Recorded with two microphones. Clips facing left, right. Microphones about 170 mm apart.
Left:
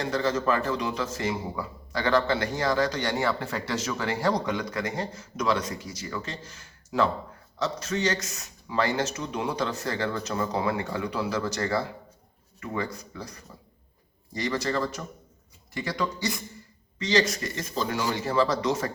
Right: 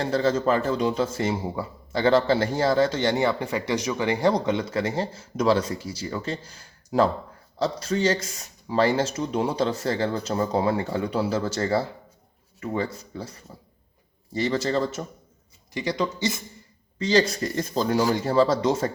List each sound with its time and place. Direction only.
0.0 s speech: 30° right (ahead or behind)